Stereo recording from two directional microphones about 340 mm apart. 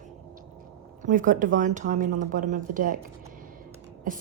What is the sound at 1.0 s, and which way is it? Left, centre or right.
A woman's voice, right.